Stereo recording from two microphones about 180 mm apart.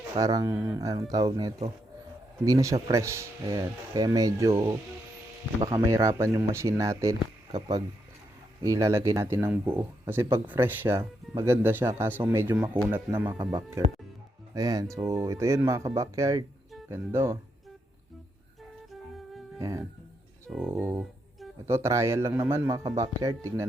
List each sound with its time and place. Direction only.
0.2 s speech: 20° right (ahead or behind)
13.4 s speech: 25° right (ahead or behind)
14.5 s speech: 20° right (ahead or behind)
19.5 s speech: 20° right (ahead or behind)